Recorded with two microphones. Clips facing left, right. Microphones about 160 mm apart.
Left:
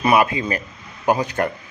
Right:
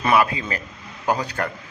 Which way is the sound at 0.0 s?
20° left (ahead or behind).